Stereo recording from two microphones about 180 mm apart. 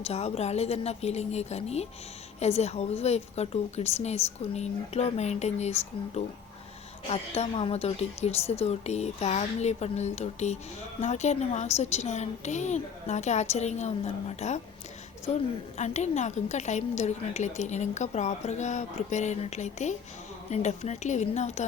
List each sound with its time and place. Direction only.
0.0 s a woman's voice: 35° left (ahead or behind)
15.8 s a woman's voice: 40° left (ahead or behind)